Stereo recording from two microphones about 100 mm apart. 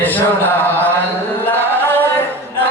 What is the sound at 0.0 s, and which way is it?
Chant, 20° left (ahead or behind).